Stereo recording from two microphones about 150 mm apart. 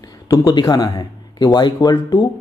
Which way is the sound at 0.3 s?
30° left (ahead or behind).